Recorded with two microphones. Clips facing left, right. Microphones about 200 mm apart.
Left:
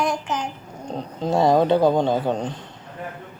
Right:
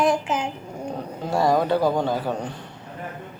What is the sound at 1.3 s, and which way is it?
Speech, 25° left (ahead or behind).